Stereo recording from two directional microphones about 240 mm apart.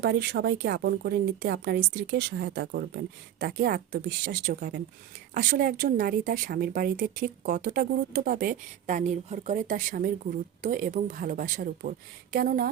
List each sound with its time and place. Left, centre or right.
0.0 s speech: right